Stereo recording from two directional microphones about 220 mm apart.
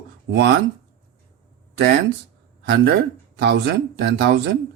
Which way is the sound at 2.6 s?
50° right (ahead or behind).